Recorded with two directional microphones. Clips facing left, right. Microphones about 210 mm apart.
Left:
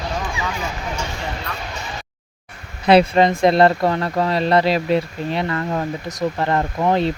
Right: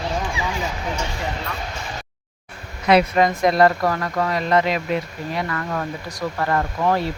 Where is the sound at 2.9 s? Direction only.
30° left (ahead or behind).